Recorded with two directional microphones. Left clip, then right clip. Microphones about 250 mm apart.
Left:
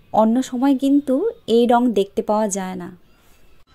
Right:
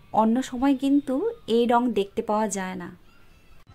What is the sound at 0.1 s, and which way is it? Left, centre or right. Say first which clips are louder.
Speech: left 5 dB; centre.